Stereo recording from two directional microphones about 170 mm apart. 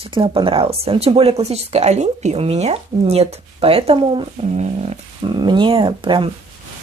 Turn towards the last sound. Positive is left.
turn(degrees=-30)  # may be behind; listen again after turning